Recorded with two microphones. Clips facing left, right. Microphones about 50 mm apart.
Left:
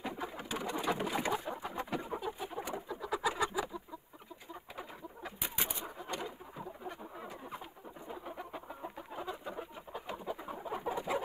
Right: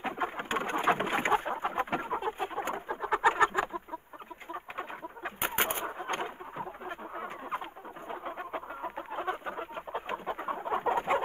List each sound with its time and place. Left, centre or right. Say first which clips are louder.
0.0 s bird: right 7 dB; right
8.1 s chicken: right 7 dB; right